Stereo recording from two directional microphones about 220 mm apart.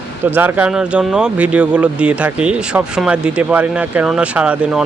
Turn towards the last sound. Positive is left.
turn(degrees=-5)  # may be behind; listen again after turning